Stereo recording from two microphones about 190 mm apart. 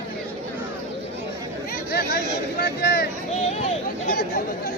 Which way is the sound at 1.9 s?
55° left (ahead or behind).